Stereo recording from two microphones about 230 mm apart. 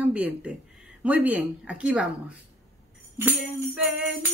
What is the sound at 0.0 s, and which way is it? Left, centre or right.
Speech, centre.